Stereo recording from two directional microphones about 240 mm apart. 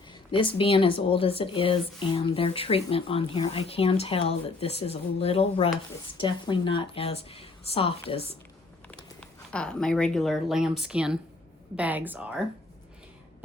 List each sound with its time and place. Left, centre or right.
0.1 s speech: left
9.2 s speech: centre